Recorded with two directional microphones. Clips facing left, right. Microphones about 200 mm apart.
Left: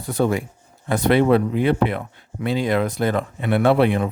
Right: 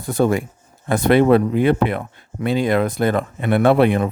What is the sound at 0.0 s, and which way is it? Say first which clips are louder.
Speech: right 3 dB; 45° right (ahead or behind).